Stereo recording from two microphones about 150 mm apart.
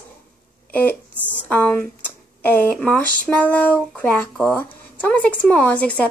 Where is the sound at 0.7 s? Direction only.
10° left (ahead or behind).